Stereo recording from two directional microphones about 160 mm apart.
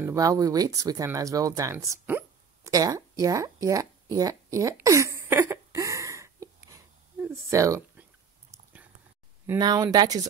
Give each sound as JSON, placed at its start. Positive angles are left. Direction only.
{"t": 0.0, "sound": "speech", "side_deg": -20}
{"t": 2.7, "sound": "a sound", "side_deg": -20}
{"t": 9.5, "sound": "speech", "side_deg": -25}